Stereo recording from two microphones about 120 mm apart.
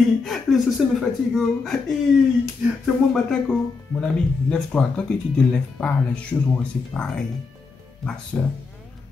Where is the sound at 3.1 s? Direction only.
5° left (ahead or behind).